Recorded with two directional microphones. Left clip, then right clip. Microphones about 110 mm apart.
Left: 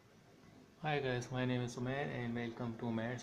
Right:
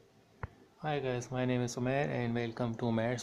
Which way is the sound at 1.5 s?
50° right (ahead or behind).